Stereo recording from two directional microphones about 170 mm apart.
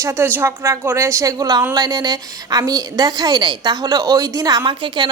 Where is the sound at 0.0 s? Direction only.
15° right (ahead or behind).